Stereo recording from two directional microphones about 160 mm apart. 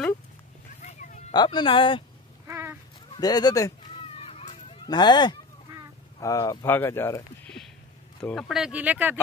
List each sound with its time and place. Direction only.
0.8 s a sound: 50° left (ahead or behind)
1.3 s speech: 30° left (ahead or behind)
2.4 s a sound: 15° right (ahead or behind)
3.2 s speech: 25° left (ahead or behind)
4.0 s children playing: 40° left (ahead or behind)
4.8 s speech: 25° left (ahead or behind)
8.2 s speech: 5° left (ahead or behind)